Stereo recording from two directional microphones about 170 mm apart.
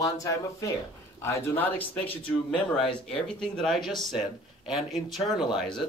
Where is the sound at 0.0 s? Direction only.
20° left (ahead or behind).